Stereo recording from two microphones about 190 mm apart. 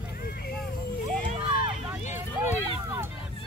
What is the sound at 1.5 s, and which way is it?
Run, 45° left (ahead or behind).